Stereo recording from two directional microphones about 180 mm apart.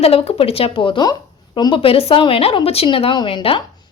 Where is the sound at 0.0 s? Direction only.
35° left (ahead or behind).